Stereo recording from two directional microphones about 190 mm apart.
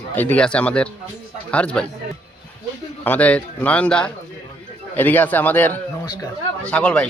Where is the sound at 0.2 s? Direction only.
5° left (ahead or behind).